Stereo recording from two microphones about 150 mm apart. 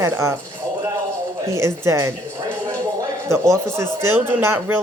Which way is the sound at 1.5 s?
20° right (ahead or behind).